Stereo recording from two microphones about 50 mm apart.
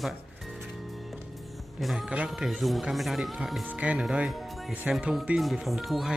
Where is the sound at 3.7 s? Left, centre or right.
Right.